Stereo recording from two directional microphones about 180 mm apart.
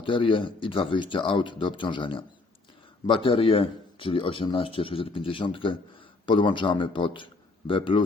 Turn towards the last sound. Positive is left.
turn(degrees=30)  # may be behind; listen again after turning